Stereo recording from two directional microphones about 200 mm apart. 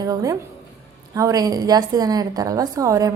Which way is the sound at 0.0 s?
15° right (ahead or behind).